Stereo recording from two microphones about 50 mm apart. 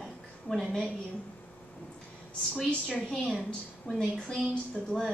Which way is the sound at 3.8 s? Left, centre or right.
Centre.